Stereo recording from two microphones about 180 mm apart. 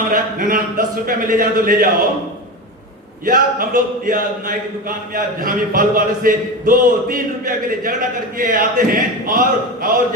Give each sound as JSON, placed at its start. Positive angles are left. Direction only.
{"t": 0.1, "sound": "speech", "side_deg": -50}
{"t": 3.2, "sound": "speech", "side_deg": -50}